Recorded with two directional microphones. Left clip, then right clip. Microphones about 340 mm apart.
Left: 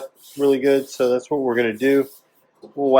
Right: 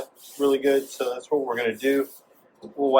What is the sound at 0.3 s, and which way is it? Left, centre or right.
Speech, left.